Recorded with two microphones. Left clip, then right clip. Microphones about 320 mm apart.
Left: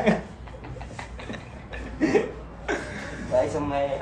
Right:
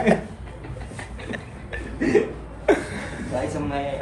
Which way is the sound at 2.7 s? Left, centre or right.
Centre.